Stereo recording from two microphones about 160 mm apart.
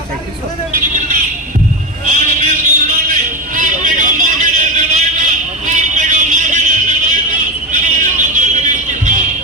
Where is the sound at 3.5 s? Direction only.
55° right (ahead or behind).